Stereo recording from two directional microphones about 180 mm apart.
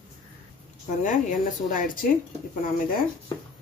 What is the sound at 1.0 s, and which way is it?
Speech, 45° left (ahead or behind).